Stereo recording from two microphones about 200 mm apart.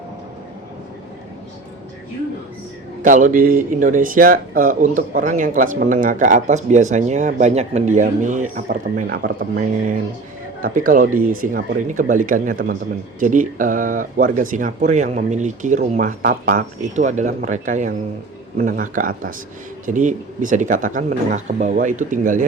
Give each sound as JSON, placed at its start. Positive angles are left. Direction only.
{"t": 3.0, "sound": "speech", "side_deg": -40}
{"t": 8.6, "sound": "speech", "side_deg": -50}